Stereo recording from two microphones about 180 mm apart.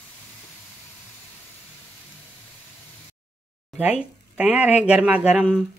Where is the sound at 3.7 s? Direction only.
10° right (ahead or behind).